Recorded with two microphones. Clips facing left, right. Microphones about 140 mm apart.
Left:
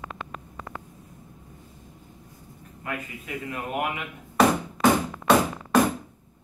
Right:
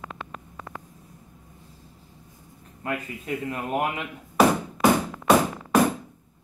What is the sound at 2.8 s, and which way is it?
A man's voice, 35° right (ahead or behind).